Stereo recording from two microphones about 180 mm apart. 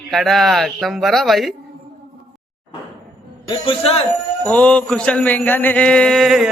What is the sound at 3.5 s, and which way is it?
Speech, 30° left (ahead or behind).